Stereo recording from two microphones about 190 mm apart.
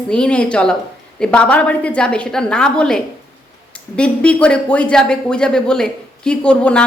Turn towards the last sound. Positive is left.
turn(degrees=5)  # may be behind; listen again after turning